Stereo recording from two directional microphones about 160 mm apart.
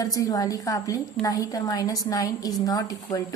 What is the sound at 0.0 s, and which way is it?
A woman's voice, 20° left (ahead or behind).